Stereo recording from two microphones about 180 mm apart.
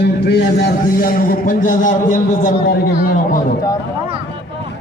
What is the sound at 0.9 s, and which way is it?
A man's voice, 50° left (ahead or behind).